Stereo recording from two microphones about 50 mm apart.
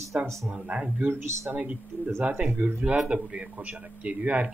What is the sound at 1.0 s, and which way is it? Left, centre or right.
Speech, right.